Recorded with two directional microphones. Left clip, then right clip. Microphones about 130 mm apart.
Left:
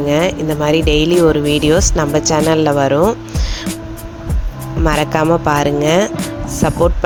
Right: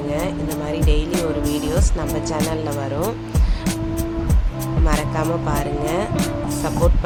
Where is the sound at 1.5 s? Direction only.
70° left (ahead or behind).